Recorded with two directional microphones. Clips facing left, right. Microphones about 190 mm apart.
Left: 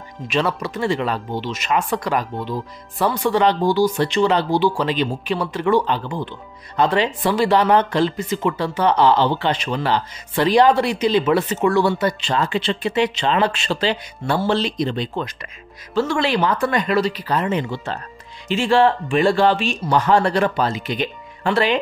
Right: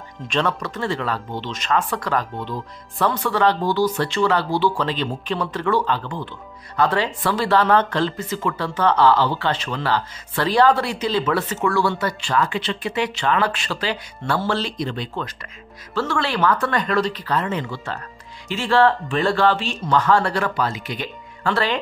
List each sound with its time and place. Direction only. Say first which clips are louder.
0.3 s speech: left 2 dB; 10° left (ahead or behind)